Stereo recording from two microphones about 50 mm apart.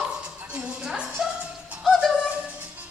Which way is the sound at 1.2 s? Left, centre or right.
Centre.